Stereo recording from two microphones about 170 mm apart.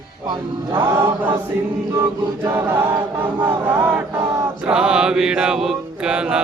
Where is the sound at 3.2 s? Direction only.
10° right (ahead or behind).